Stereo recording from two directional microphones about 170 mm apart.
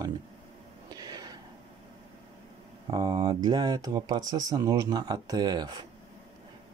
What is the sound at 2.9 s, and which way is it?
Speech, 25° right (ahead or behind).